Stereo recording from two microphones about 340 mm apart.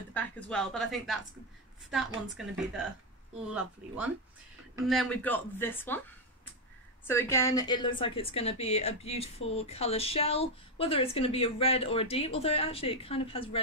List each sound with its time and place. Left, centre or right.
0.1 s speech: centre
7.1 s a woman's voice: centre